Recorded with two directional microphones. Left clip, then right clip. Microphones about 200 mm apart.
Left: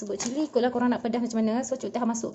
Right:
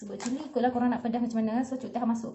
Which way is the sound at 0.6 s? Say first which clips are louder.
Left 2 dB; 55° left (ahead or behind).